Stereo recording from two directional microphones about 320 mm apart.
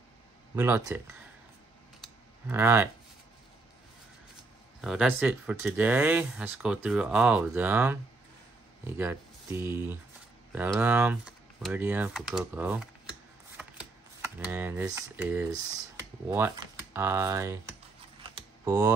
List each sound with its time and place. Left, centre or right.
0.6 s speech: centre
2.4 s speech: centre
4.8 s speech: centre
18.3 s typing: centre